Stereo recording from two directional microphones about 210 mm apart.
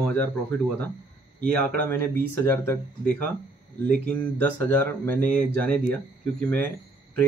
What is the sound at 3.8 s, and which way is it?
Speech, 45° right (ahead or behind).